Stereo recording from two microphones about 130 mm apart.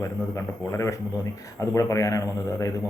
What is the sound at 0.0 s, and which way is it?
Speech, 25° left (ahead or behind).